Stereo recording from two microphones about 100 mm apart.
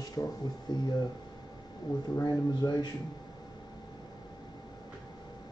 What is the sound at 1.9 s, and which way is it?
Speech, 45° left (ahead or behind).